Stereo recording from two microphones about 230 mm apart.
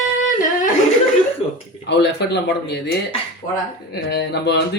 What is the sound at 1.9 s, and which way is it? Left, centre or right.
Speech, left.